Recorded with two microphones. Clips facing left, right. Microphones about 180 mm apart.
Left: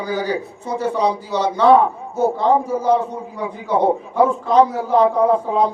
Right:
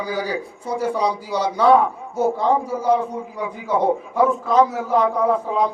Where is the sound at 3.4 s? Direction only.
30° left (ahead or behind).